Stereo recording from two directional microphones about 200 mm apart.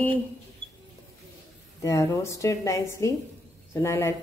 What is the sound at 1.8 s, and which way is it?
A woman's voice, 15° left (ahead or behind).